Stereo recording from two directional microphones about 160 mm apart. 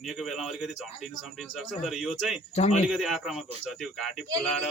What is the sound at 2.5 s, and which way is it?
Speech, 45° left (ahead or behind).